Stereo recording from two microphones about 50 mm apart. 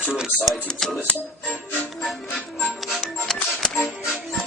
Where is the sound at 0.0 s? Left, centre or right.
Centre.